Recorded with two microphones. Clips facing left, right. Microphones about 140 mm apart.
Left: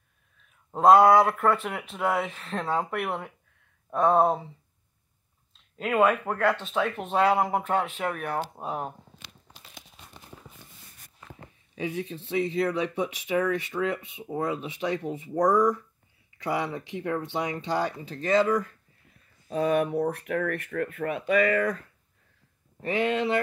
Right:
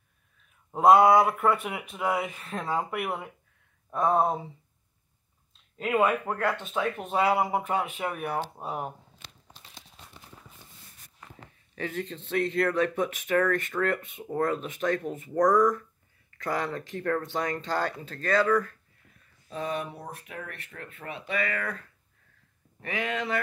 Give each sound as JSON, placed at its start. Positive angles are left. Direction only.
{"t": 0.7, "sound": "speech", "side_deg": -5}
{"t": 5.8, "sound": "speech", "side_deg": 0}
{"t": 11.7, "sound": "speech", "side_deg": 15}
{"t": 19.5, "sound": "speech", "side_deg": 40}
{"t": 19.8, "sound": "speech", "side_deg": 55}